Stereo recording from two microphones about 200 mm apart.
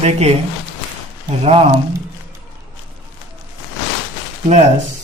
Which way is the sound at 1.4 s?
30° right (ahead or behind).